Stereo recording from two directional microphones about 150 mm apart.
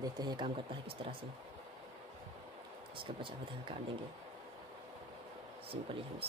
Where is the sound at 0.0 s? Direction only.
25° right (ahead or behind).